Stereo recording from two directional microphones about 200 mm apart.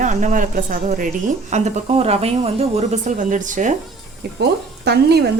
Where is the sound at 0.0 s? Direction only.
40° right (ahead or behind).